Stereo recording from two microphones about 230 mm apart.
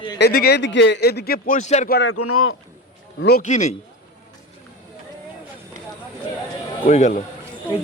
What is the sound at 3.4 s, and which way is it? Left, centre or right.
Speech, left.